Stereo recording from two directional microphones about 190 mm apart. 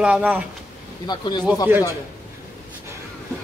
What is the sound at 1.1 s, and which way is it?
Speech, 20° left (ahead or behind).